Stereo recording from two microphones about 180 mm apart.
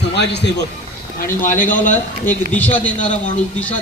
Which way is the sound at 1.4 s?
45° left (ahead or behind).